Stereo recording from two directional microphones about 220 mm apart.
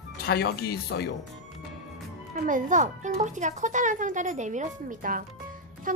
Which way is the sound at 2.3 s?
35° right (ahead or behind).